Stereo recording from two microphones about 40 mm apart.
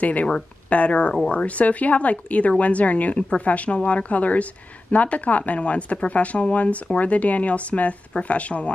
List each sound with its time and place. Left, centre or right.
0.0 s speech: left